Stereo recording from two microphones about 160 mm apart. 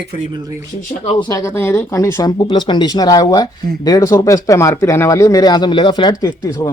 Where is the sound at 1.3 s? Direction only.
15° left (ahead or behind).